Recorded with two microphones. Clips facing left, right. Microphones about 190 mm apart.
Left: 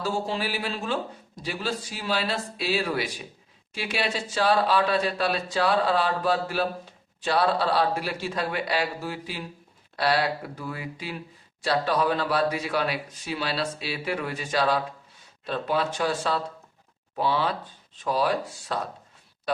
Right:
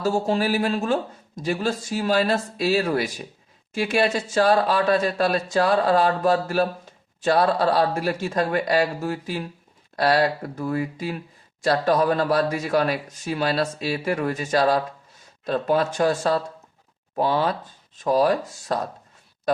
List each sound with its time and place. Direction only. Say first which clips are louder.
0.0 s speech: right 6 dB; 45° right (ahead or behind)